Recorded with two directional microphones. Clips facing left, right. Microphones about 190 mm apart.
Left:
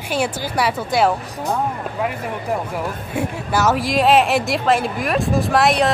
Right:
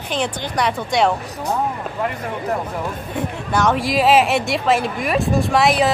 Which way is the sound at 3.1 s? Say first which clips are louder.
Left 1 dB; 5° left (ahead or behind).